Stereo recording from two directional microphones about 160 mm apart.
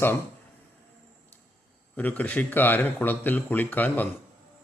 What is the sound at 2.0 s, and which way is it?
A man's voice, 10° left (ahead or behind).